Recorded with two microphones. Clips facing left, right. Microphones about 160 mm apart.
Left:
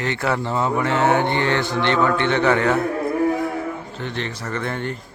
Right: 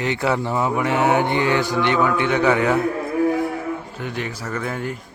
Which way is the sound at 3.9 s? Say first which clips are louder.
Even; 10° right (ahead or behind).